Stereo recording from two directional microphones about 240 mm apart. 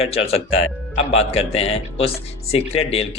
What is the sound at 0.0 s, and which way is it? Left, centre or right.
Speech, left.